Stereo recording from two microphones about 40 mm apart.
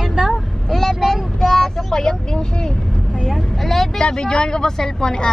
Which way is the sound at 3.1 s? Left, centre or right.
Centre.